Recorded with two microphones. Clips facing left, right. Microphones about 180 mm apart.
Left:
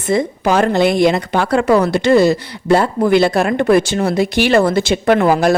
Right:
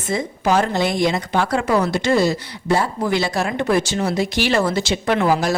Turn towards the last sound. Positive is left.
turn(degrees=55)  # may be behind; listen again after turning